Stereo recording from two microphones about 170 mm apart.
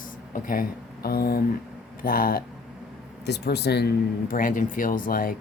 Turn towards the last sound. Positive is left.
turn(degrees=55)  # may be behind; listen again after turning